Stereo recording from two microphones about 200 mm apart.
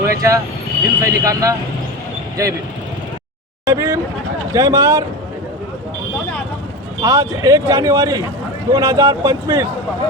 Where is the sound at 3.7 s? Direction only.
15° right (ahead or behind).